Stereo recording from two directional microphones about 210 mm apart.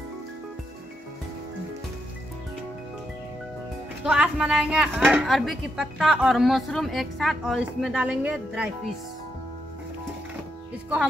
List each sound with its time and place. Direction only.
4.0 s speech: 5° right (ahead or behind)